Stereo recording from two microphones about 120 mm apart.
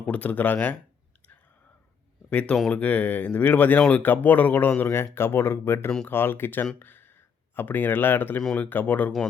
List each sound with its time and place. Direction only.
0.0 s speech: 10° left (ahead or behind)
2.3 s speech: 10° left (ahead or behind)
6.7 s a sound: 15° left (ahead or behind)
7.5 s speech: 15° left (ahead or behind)
8.4 s speech: 5° left (ahead or behind)
8.6 s speech: 15° left (ahead or behind)